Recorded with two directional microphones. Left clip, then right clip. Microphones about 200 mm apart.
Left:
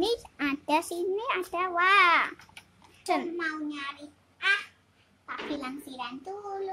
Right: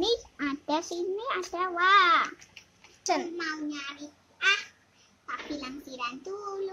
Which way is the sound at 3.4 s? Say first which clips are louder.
Left 1 dB; 10° left (ahead or behind).